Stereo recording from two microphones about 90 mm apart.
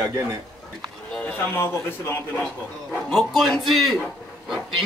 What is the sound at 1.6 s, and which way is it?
Speech, 25° left (ahead or behind).